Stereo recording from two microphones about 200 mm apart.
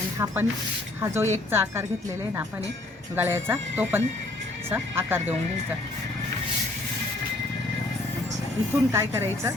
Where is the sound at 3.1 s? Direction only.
10° right (ahead or behind).